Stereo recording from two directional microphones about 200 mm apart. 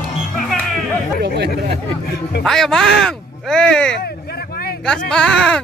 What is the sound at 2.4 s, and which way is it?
Speech, centre (ahead or behind).